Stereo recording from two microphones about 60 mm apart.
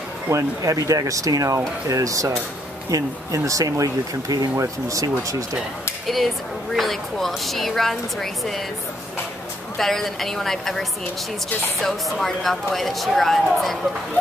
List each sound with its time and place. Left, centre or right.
0.6 s speech: right
4.6 s speech: right
6.0 s a woman's voice: centre
9.8 s a woman's voice: centre